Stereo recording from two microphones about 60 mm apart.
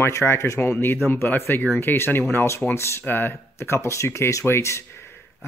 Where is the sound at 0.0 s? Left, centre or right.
Left.